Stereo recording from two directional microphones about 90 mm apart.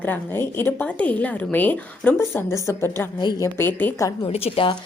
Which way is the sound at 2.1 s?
35° left (ahead or behind).